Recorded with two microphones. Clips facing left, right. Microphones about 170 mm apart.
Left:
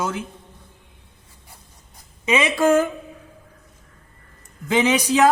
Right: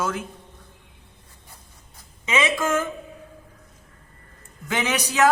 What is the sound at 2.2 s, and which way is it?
Speech, 15° left (ahead or behind).